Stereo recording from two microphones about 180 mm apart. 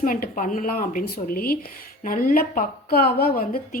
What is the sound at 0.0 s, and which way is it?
A woman's voice, 50° left (ahead or behind).